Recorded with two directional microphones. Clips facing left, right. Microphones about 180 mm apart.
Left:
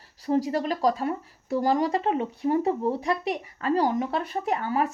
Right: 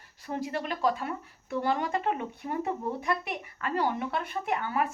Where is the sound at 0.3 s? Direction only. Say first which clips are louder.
Left 8 dB; 40° left (ahead or behind).